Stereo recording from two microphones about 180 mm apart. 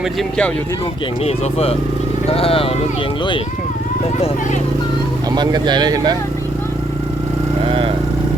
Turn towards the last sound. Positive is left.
turn(degrees=-30)  # may be behind; listen again after turning